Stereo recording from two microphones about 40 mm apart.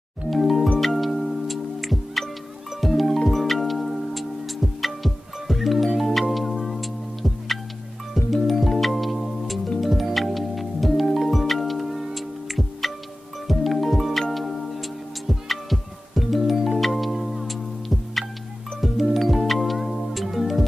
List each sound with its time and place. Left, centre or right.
0.3 s music: centre